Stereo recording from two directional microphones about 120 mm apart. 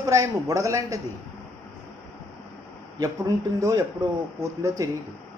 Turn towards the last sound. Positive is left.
turn(degrees=-25)  # may be behind; listen again after turning